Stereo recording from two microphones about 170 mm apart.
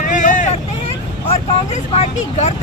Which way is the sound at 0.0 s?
50° left (ahead or behind).